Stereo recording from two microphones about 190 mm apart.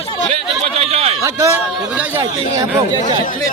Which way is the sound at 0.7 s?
35° right (ahead or behind).